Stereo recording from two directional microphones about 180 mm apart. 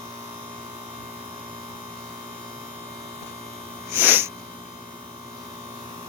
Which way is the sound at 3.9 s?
10° right (ahead or behind).